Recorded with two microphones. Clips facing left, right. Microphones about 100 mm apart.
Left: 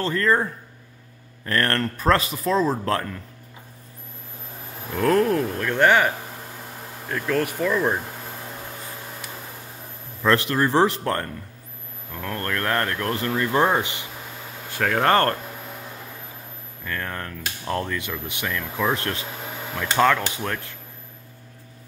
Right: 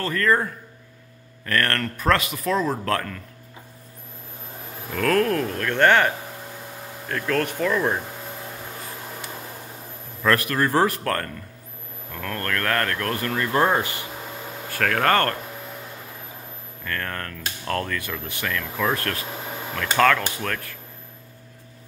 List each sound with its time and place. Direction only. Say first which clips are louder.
0.0 s speech: even; 25° left (ahead or behind)
1.4 s speech: left 1 dB; 30° left (ahead or behind)
4.9 s speech: left 2 dB; 20° left (ahead or behind)
10.2 s speech: left 1 dB; 20° left (ahead or behind)
15.0 s speech: left 2 dB; 30° left (ahead or behind)
16.8 s speech: even; 15° left (ahead or behind)